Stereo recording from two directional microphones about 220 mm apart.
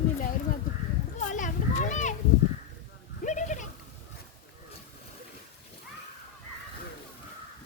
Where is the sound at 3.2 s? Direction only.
35° left (ahead or behind).